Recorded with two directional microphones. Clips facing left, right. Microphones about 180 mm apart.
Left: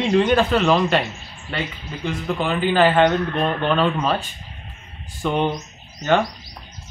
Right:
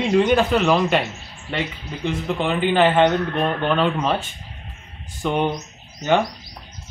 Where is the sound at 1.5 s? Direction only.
20° right (ahead or behind).